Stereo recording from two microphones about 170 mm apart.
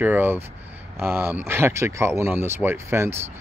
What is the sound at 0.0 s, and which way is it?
Speech, 10° right (ahead or behind).